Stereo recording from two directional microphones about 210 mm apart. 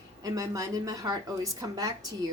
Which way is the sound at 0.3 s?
15° right (ahead or behind).